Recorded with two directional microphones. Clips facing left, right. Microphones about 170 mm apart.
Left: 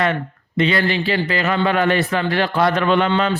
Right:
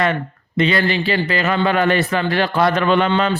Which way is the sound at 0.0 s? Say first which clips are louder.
Right 1 dB; 40° right (ahead or behind).